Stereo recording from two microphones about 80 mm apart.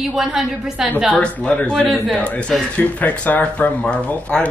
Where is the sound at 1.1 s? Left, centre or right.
Centre.